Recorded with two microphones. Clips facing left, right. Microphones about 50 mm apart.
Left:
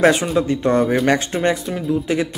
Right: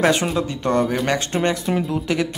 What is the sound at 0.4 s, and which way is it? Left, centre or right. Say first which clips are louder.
Speech: left 3 dB; left.